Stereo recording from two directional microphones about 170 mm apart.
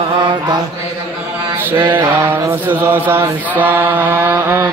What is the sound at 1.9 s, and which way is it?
Chant, 10° right (ahead or behind).